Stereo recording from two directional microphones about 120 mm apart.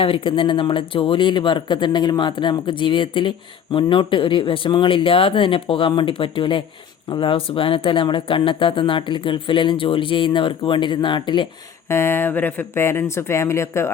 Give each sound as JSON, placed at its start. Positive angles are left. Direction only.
{"t": 0.0, "sound": "speech", "side_deg": 45}
{"t": 11.9, "sound": "speech", "side_deg": 20}